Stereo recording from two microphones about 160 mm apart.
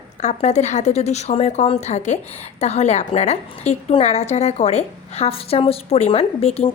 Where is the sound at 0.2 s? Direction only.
45° left (ahead or behind).